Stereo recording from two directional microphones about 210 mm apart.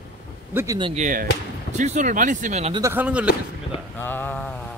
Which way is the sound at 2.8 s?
10° right (ahead or behind).